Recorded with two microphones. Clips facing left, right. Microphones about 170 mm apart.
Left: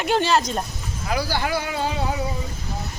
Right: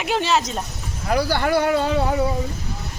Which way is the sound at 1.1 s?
60° right (ahead or behind).